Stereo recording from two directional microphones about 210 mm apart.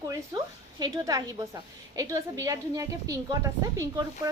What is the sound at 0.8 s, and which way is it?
A woman's voice, 15° right (ahead or behind).